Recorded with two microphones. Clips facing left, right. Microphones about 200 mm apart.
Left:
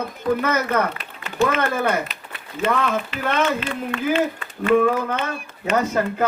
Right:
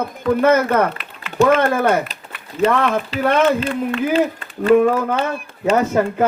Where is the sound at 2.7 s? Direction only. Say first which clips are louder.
Even; 55° right (ahead or behind).